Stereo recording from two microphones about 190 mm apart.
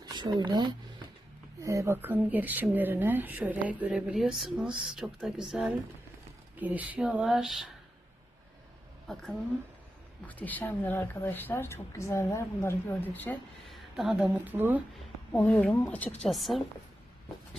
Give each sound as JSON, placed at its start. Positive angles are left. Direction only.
{"t": 0.0, "sound": "speech", "side_deg": -20}
{"t": 9.0, "sound": "a woman's voice", "side_deg": 0}
{"t": 13.9, "sound": "speech", "side_deg": 0}
{"t": 15.3, "sound": "a woman's voice", "side_deg": 10}